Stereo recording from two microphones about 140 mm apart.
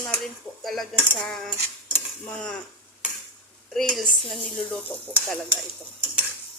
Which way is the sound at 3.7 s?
5° left (ahead or behind).